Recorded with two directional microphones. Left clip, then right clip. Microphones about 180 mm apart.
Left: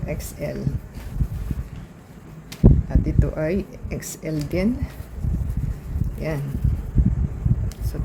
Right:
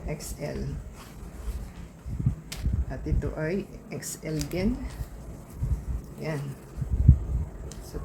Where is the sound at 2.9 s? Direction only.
45° left (ahead or behind).